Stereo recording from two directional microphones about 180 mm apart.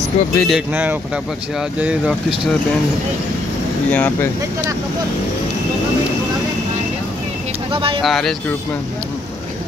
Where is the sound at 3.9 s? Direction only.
10° left (ahead or behind).